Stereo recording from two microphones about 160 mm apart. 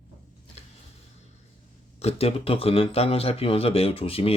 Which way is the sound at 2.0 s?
40° left (ahead or behind).